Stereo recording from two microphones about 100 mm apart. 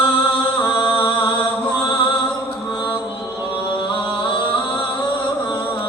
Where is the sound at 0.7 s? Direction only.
50° left (ahead or behind).